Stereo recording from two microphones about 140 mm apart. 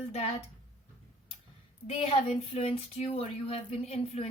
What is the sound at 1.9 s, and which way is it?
Speech, 45° left (ahead or behind).